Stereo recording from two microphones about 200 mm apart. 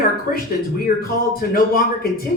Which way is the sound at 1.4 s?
45° left (ahead or behind).